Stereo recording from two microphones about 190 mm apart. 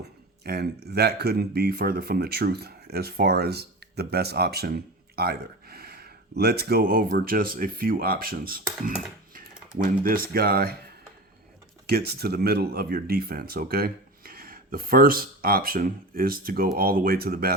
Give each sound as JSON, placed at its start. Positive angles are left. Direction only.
{"t": 0.4, "sound": "speech", "side_deg": -60}
{"t": 11.9, "sound": "speech", "side_deg": -55}